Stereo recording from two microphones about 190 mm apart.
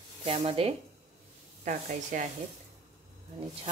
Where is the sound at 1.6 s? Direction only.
45° right (ahead or behind).